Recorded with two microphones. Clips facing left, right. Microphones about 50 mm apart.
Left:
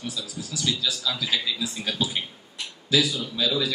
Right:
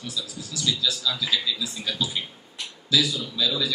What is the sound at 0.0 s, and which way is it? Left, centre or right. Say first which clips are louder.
A man's voice: left 1 dB; left.